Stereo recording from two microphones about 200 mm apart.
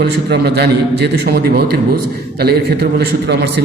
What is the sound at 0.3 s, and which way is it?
A man's voice, 55° right (ahead or behind).